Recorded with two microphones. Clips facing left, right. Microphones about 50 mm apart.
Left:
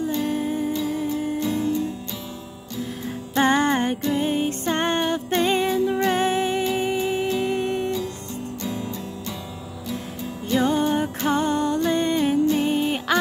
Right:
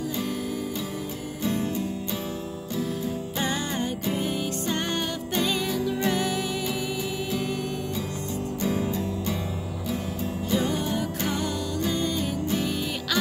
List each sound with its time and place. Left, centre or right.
0.0 s music: left
3.3 s music: left
10.6 s music: left